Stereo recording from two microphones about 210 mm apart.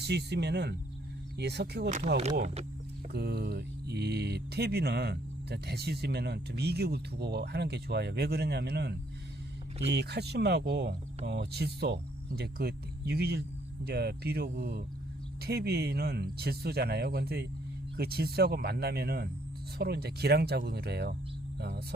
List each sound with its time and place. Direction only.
0.0 s speech: 50° right (ahead or behind)
3.1 s speech: 50° right (ahead or behind)